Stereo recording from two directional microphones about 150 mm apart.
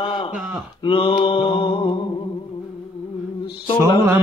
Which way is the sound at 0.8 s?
35° left (ahead or behind).